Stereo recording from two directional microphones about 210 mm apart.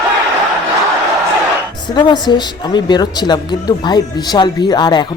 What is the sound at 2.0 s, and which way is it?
A woman's voice, 20° left (ahead or behind).